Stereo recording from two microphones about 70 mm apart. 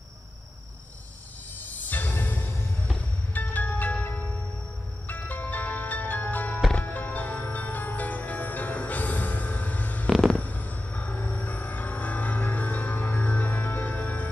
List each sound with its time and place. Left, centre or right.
1.8 s music: left
3.3 s music: left